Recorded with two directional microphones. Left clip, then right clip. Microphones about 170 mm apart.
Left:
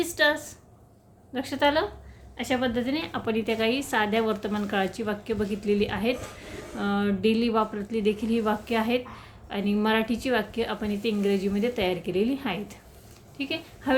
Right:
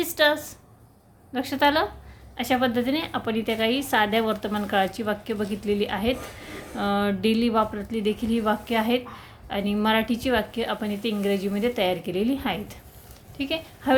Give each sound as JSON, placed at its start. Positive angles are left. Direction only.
{"t": 0.0, "sound": "a woman's voice", "side_deg": -25}